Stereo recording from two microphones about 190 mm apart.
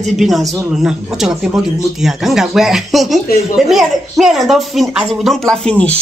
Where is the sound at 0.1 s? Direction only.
Centre (ahead or behind).